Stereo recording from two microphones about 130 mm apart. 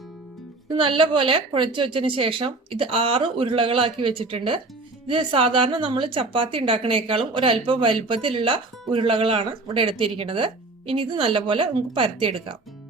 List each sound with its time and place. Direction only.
0.7 s speech: 40° right (ahead or behind)